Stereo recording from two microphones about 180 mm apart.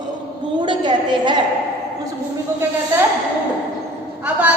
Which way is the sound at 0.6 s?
25° right (ahead or behind).